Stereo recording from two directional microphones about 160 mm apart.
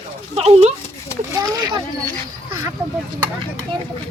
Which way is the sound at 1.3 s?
25° right (ahead or behind).